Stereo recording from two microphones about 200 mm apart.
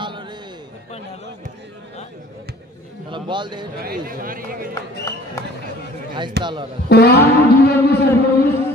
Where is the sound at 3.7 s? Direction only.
45° right (ahead or behind).